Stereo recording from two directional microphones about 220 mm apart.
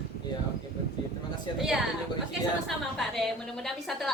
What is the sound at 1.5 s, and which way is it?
Speech, 20° left (ahead or behind).